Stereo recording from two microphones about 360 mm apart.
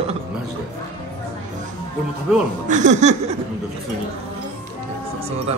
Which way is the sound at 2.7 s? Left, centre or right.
Centre.